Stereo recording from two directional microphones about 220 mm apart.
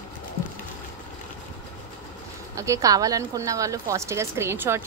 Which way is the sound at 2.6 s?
15° right (ahead or behind).